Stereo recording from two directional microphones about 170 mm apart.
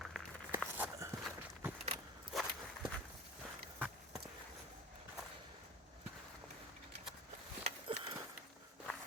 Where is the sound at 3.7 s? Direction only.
10° right (ahead or behind).